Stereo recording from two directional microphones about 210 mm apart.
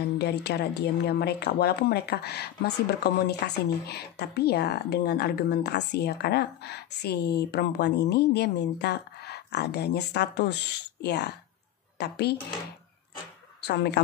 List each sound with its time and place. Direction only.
0.2 s a woman's voice: 50° left (ahead or behind)
13.7 s a woman's voice: 50° left (ahead or behind)